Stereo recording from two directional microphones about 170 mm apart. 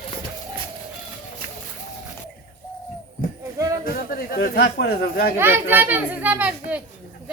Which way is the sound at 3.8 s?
60° left (ahead or behind).